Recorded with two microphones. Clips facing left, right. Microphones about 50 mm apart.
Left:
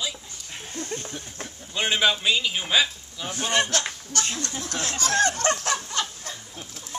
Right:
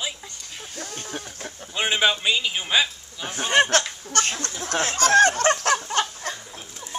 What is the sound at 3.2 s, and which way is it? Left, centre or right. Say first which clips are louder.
Speech: right 4 dB; right.